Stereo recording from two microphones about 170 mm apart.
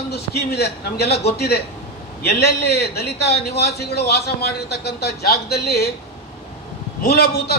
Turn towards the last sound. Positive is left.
turn(degrees=70)  # may be behind; listen again after turning